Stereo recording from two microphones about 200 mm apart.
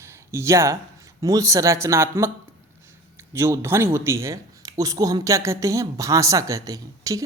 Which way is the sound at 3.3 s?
15° right (ahead or behind).